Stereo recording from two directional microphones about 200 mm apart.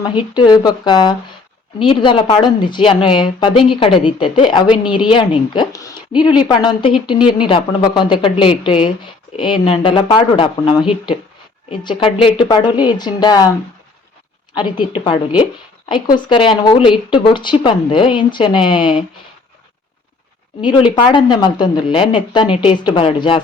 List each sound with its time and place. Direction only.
0.0 s speech: 20° left (ahead or behind)
14.5 s speech: 25° left (ahead or behind)
20.6 s speech: 25° left (ahead or behind)